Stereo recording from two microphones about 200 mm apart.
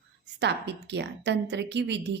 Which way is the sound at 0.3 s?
60° right (ahead or behind).